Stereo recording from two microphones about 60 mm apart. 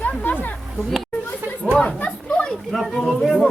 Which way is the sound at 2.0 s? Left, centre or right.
Left.